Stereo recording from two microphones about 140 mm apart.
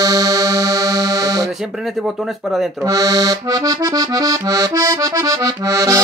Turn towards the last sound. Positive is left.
turn(degrees=-25)  # may be behind; listen again after turning